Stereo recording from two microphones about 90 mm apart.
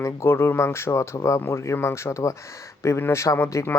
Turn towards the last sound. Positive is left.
turn(degrees=35)  # may be behind; listen again after turning